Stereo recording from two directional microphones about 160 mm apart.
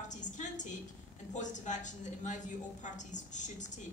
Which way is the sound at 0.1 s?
50° left (ahead or behind).